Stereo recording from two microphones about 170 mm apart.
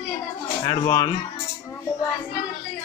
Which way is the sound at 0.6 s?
20° left (ahead or behind).